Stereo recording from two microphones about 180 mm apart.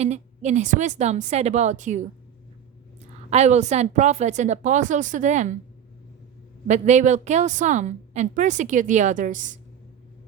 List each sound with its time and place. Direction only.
0.0 s a woman's voice: 40° right (ahead or behind)
3.2 s a woman's voice: 40° right (ahead or behind)
6.7 s a woman's voice: 40° right (ahead or behind)